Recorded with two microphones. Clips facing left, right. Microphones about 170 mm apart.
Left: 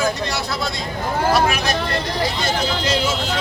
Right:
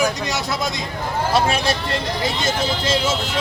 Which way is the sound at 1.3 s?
30° right (ahead or behind).